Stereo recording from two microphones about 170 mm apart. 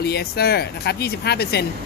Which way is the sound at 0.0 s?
70° left (ahead or behind).